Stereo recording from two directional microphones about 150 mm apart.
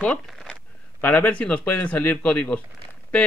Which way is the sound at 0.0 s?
5° left (ahead or behind).